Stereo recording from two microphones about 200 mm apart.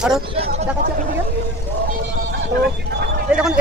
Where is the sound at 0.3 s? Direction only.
30° right (ahead or behind).